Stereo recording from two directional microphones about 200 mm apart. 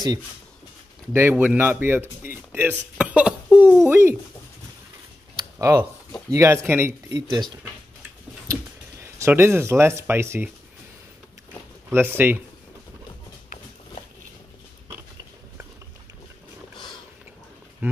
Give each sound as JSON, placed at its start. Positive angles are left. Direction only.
{"t": 1.1, "sound": "speech", "side_deg": -10}
{"t": 5.6, "sound": "speech", "side_deg": -15}
{"t": 7.2, "sound": "speech", "side_deg": -20}
{"t": 9.0, "sound": "speech", "side_deg": -10}
{"t": 11.9, "sound": "speech", "side_deg": -10}